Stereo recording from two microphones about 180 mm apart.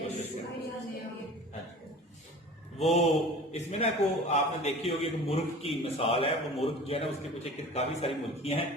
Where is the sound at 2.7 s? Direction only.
35° left (ahead or behind).